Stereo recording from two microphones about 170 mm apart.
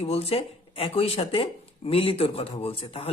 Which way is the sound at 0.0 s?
35° left (ahead or behind).